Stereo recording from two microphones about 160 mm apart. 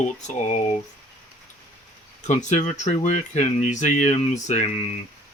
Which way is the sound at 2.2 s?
50° left (ahead or behind).